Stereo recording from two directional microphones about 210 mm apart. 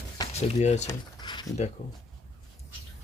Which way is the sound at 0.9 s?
20° left (ahead or behind).